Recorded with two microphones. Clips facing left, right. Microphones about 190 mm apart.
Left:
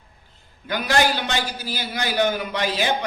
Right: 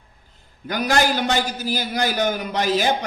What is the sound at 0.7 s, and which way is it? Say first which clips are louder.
A man's voice: right 1 dB; 45° right (ahead or behind).